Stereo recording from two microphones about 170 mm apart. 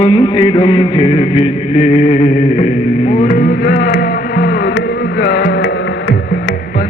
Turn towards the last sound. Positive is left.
turn(degrees=75)  # may be behind; listen again after turning